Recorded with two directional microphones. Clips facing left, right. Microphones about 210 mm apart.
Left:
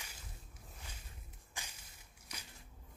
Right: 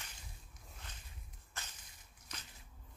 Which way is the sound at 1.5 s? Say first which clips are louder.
Even; 10° left (ahead or behind).